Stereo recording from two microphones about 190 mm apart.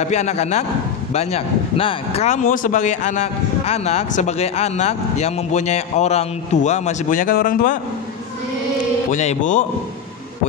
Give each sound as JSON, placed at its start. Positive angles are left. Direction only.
{"t": 0.0, "sound": "speech", "side_deg": 35}
{"t": 9.1, "sound": "speech", "side_deg": 40}